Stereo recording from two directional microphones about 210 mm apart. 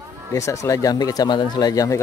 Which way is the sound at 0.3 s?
15° left (ahead or behind).